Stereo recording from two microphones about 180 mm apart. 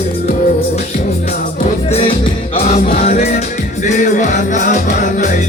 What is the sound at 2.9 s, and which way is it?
Music, 40° left (ahead or behind).